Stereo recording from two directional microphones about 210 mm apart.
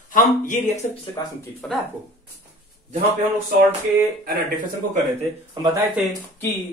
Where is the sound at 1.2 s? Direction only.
15° left (ahead or behind).